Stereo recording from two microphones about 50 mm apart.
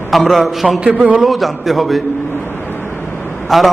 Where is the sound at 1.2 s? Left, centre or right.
Centre.